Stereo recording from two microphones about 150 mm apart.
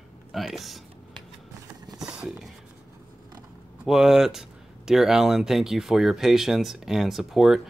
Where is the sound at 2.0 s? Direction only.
5° right (ahead or behind).